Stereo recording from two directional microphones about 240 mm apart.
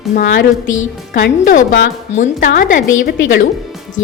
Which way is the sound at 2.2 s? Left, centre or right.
Left.